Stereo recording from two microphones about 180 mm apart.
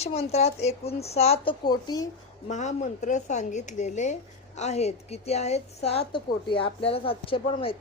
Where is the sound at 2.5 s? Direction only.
40° left (ahead or behind).